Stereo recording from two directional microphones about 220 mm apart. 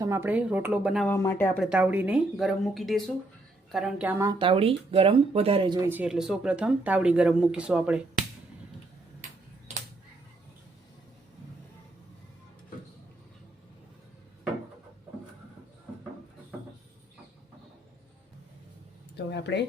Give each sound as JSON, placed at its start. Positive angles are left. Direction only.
{"t": 0.0, "sound": "speech", "side_deg": -10}
{"t": 1.1, "sound": "speech", "side_deg": 10}
{"t": 5.9, "sound": "speech", "side_deg": -5}
{"t": 19.1, "sound": "a sound", "side_deg": 50}